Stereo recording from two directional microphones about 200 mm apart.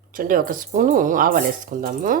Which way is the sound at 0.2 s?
45° right (ahead or behind).